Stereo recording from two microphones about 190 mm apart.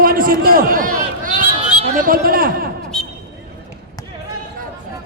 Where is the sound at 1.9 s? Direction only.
50° right (ahead or behind).